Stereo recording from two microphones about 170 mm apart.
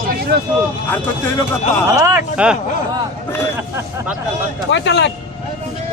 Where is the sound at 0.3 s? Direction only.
75° right (ahead or behind).